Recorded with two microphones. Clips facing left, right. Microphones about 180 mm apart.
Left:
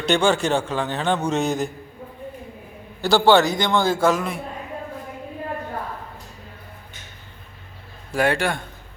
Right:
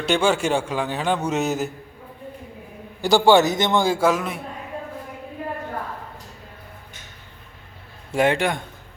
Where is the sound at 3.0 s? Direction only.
15° right (ahead or behind).